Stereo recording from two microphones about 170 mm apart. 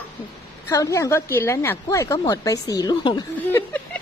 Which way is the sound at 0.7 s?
20° left (ahead or behind).